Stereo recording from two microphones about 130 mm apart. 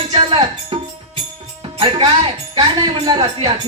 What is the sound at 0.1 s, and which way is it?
Music, 45° right (ahead or behind).